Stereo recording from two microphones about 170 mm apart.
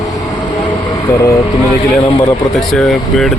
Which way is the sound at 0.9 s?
20° left (ahead or behind).